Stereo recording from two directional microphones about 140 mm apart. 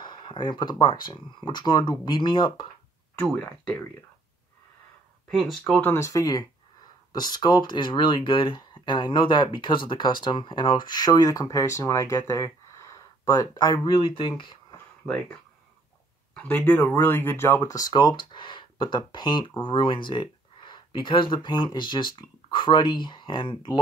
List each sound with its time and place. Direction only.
0.0 s a sound: 35° left (ahead or behind)
1.0 s speech: 30° left (ahead or behind)
5.3 s speech: centre (ahead or behind)
5.9 s speech: 25° left (ahead or behind)
16.3 s speech: 10° left (ahead or behind); by 23.8 s 30° left (ahead or behind)